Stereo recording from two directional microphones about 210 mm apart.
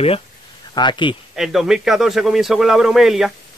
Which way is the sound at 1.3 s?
Centre (ahead or behind).